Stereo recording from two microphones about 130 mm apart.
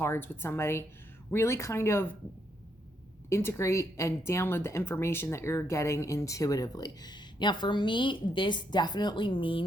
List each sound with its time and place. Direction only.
0.0 s speech: 20° left (ahead or behind)
3.2 s speech: 20° left (ahead or behind); by 9.6 s 40° left (ahead or behind)